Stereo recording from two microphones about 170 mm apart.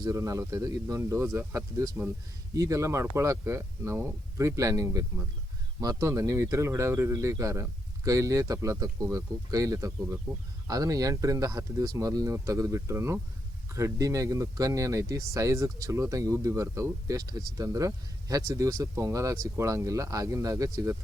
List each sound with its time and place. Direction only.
0.0 s speech: 20° right (ahead or behind)